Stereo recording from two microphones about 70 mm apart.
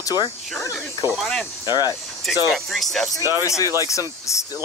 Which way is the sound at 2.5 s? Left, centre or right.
Centre.